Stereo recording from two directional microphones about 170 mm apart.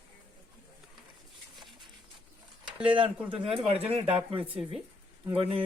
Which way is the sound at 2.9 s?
30° right (ahead or behind).